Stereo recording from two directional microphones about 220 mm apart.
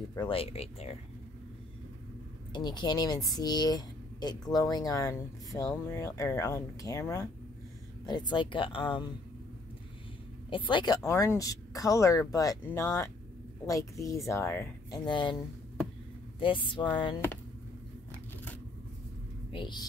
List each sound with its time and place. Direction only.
0.1 s speech: 20° left (ahead or behind)
2.5 s speech: 20° left (ahead or behind)
10.5 s speech: 20° left (ahead or behind)
16.3 s speech: 25° left (ahead or behind)
19.5 s speech: 20° left (ahead or behind)